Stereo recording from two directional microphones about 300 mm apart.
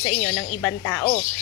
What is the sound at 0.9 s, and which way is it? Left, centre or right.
Speech, centre.